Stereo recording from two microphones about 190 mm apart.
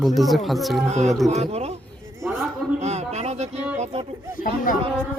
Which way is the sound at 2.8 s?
35° right (ahead or behind).